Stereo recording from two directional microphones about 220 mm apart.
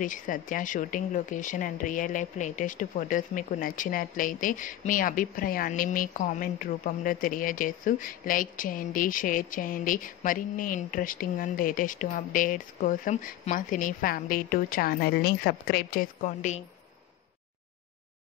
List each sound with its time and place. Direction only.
0.0 s speech: 35° left (ahead or behind)